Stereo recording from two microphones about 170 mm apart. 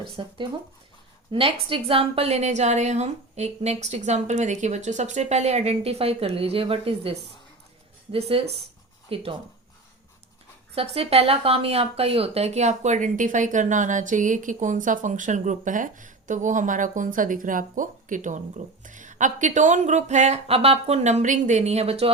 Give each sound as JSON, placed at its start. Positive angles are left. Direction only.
{"t": 0.2, "sound": "a woman's voice", "side_deg": -30}
{"t": 10.8, "sound": "speech", "side_deg": -35}